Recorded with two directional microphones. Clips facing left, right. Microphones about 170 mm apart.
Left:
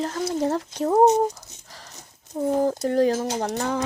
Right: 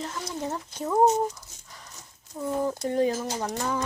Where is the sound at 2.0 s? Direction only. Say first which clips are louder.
Left 8 dB; 40° left (ahead or behind).